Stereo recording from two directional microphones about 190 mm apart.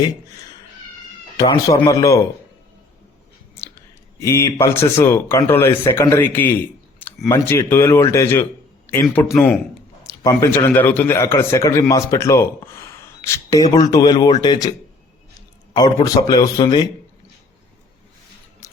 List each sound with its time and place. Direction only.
1.4 s a man's voice: 20° left (ahead or behind)
4.2 s a man's voice: 15° left (ahead or behind)
15.7 s speech: 20° left (ahead or behind)
18.6 s music: 15° left (ahead or behind)